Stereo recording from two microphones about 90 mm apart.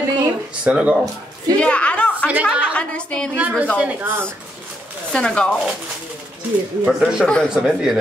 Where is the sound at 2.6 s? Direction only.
10° left (ahead or behind).